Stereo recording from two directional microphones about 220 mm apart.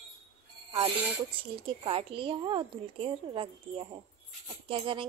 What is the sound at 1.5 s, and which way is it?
A woman's voice, 25° right (ahead or behind).